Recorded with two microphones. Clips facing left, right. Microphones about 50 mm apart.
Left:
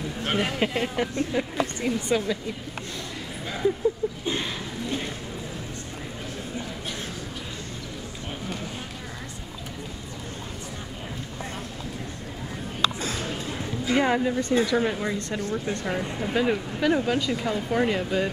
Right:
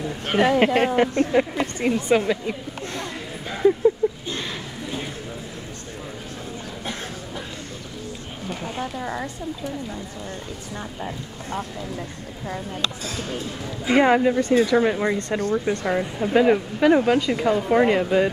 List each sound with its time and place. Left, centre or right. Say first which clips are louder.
0.3 s speech: right 9 dB; right
4.0 s a sound: right 6 dB; right
13.8 s speech: right 6 dB; right
14.8 s speech: right 5 dB; right
15.1 s speech: right 6 dB; right
15.9 s speech: right 7 dB; centre